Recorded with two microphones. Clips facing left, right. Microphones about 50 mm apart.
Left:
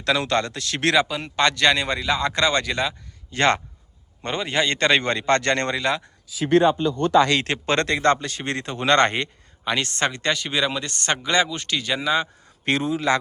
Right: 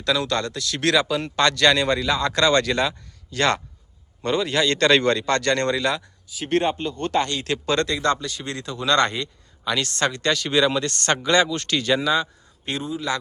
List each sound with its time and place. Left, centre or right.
0.0 s speech: left
1.0 s speech: centre
3.3 s speech: left
7.4 s speech: left
9.6 s speech: left; by 12.0 s centre
12.6 s a man's voice: left